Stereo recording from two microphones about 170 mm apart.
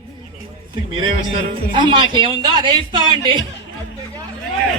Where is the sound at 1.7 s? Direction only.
25° right (ahead or behind).